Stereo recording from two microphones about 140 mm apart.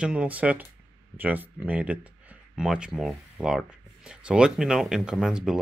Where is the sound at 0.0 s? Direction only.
10° right (ahead or behind).